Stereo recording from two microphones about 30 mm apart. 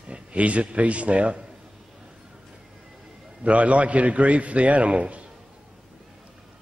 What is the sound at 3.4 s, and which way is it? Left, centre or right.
A man's voice, right.